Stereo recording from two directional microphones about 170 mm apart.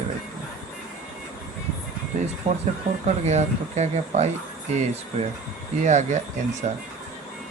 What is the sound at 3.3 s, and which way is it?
Speech, 40° right (ahead or behind).